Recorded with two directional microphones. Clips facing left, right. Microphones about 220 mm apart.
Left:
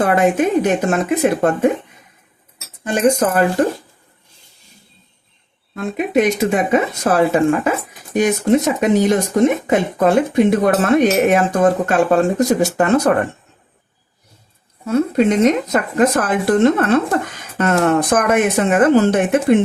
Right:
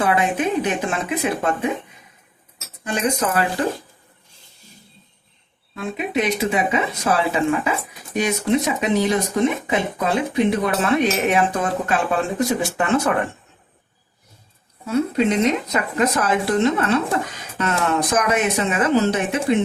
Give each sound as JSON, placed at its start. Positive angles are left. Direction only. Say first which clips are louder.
{"t": 0.0, "sound": "speech", "louder": "left 5 dB", "side_deg": 45}
{"t": 2.8, "sound": "speech", "louder": "left 7 dB", "side_deg": 50}
{"t": 5.7, "sound": "speech", "louder": "left 6 dB", "side_deg": 45}
{"t": 14.8, "sound": "speech", "louder": "left 4 dB", "side_deg": 45}